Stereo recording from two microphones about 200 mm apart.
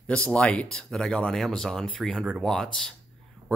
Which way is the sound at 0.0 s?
5° left (ahead or behind).